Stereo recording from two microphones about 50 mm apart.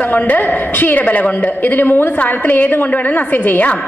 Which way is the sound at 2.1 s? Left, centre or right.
Left.